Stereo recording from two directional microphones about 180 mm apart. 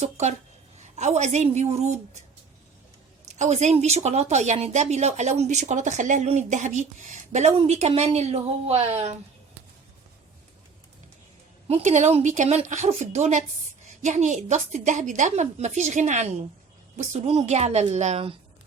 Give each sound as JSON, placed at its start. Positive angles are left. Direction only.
{"t": 0.0, "sound": "speech", "side_deg": -40}
{"t": 3.2, "sound": "speech", "side_deg": -40}
{"t": 11.7, "sound": "speech", "side_deg": -40}